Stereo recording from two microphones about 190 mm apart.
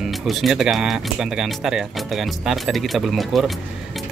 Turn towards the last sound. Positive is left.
turn(degrees=0)  # may be behind; listen again after turning